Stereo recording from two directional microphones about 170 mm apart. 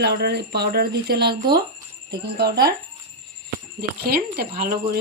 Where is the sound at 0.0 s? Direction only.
75° right (ahead or behind).